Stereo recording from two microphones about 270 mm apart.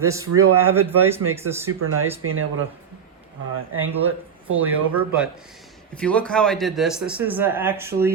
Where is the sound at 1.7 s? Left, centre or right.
Right.